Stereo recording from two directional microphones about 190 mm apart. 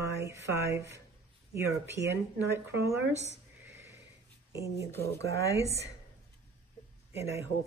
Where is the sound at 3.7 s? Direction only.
15° right (ahead or behind).